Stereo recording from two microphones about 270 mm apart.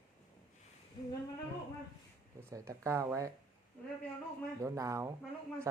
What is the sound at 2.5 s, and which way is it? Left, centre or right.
Speech, centre.